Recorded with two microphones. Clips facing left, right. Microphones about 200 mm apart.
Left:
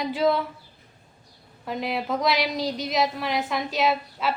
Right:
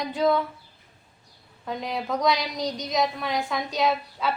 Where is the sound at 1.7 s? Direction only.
5° left (ahead or behind).